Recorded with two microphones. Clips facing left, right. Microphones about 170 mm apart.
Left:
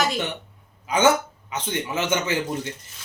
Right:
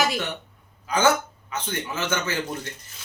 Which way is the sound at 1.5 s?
20° left (ahead or behind).